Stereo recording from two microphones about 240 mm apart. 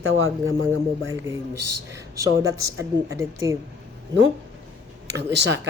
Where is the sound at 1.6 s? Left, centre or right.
Right.